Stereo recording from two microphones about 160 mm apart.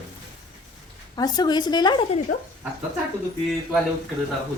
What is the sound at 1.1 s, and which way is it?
Speech, 25° left (ahead or behind).